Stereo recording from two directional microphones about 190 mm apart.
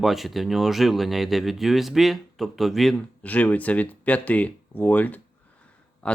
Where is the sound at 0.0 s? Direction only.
Centre (ahead or behind).